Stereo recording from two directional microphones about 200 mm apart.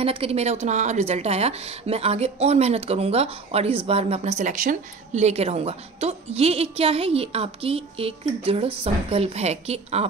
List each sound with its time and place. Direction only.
0.0 s a woman's voice: 30° right (ahead or behind)